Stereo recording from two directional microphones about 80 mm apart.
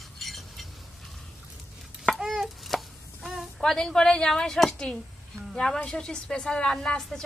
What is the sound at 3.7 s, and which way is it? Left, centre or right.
A woman's voice, centre.